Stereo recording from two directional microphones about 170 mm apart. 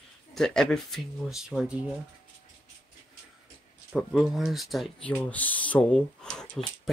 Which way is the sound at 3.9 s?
5° right (ahead or behind).